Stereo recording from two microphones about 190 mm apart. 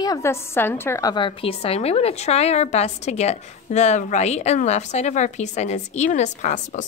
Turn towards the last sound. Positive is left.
turn(degrees=40)  # may be behind; listen again after turning